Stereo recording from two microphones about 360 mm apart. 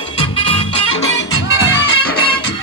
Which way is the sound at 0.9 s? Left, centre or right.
Left.